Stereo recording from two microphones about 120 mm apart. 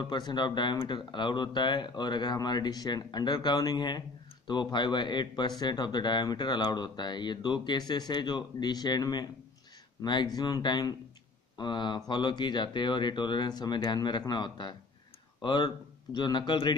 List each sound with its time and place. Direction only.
0.0 s speech: 40° left (ahead or behind)